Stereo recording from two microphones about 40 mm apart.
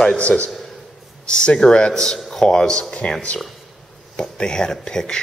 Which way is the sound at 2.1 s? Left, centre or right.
Centre.